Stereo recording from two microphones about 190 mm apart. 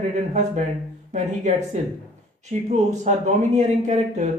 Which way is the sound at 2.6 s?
40° right (ahead or behind).